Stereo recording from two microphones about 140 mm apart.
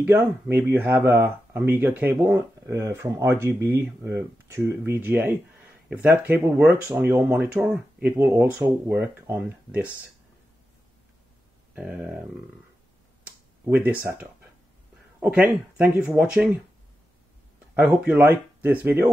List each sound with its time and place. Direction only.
0.0 s speech: 15° right (ahead or behind)
11.7 s speech: 10° right (ahead or behind)
13.2 s a sound: 10° right (ahead or behind)
14.0 s speech: 15° right (ahead or behind)
17.7 s speech: 10° right (ahead or behind)